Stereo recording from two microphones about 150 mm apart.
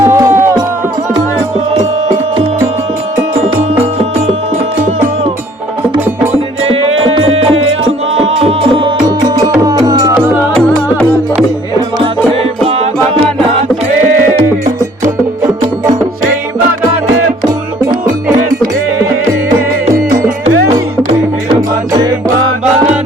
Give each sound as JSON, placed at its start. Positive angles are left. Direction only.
{"t": 0.0, "sound": "music", "side_deg": -20}
{"t": 1.8, "sound": "music", "side_deg": -45}
{"t": 6.7, "sound": "music", "side_deg": -40}
{"t": 10.2, "sound": "music", "side_deg": 5}
{"t": 12.6, "sound": "music", "side_deg": -40}